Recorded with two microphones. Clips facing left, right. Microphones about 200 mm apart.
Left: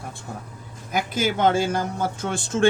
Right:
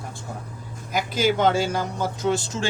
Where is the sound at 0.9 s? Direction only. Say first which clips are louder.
Right 2 dB; 50° left (ahead or behind).